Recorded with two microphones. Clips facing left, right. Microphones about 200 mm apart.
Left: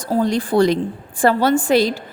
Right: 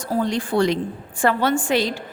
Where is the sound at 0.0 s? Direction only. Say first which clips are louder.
Left 4 dB; 35° left (ahead or behind).